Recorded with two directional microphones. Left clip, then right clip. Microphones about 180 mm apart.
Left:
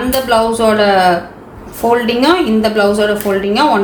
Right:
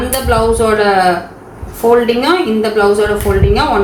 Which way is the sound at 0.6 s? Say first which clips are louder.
Even; 45° left (ahead or behind).